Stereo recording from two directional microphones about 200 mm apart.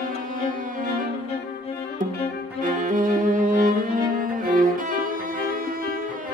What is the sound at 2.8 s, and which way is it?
Cello, 40° right (ahead or behind).